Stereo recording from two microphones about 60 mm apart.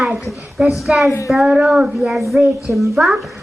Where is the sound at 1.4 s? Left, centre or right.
Centre.